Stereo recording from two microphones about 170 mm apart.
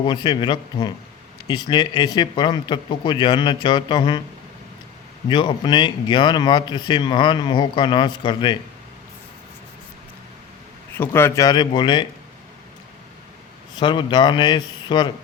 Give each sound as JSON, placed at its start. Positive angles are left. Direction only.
{"t": 0.0, "sound": "speech", "side_deg": 25}
{"t": 5.3, "sound": "speech", "side_deg": 25}
{"t": 10.9, "sound": "speech", "side_deg": 15}
{"t": 13.7, "sound": "speech", "side_deg": 25}